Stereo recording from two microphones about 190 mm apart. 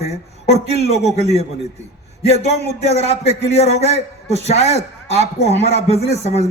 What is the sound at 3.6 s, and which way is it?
A man's voice, 35° left (ahead or behind).